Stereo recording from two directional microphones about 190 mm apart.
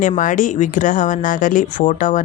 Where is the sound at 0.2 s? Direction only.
40° left (ahead or behind).